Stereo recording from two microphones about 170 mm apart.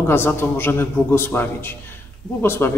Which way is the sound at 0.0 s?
15° left (ahead or behind).